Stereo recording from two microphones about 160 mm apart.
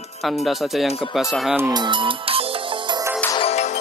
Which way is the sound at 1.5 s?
25° right (ahead or behind).